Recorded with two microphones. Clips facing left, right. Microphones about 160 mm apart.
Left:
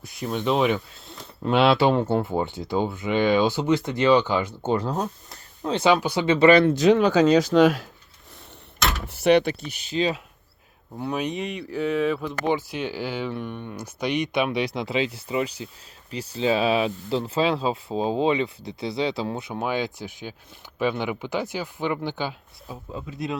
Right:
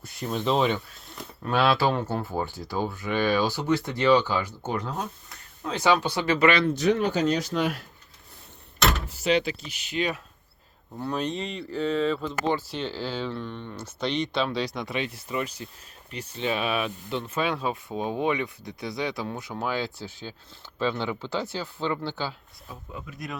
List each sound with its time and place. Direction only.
0.0 s speech: centre (ahead or behind)
1.0 s speech: 20° left (ahead or behind)
4.9 s speech: 35° left (ahead or behind)
6.7 s speech: 90° left
9.2 s speech: 65° left (ahead or behind)
9.9 s speech: 30° left (ahead or behind)
10.9 s speech: 10° left (ahead or behind)
22.7 s speech: 25° left (ahead or behind)